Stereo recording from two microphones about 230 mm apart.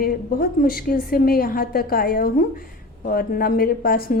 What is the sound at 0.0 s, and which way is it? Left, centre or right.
A woman's voice, left.